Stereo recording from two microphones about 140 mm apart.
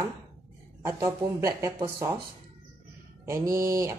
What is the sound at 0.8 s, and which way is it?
Speech, 20° right (ahead or behind).